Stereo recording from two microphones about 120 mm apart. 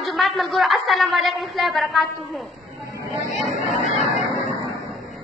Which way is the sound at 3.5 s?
75° left (ahead or behind).